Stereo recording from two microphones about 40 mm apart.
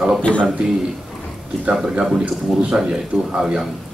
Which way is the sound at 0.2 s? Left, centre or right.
Left.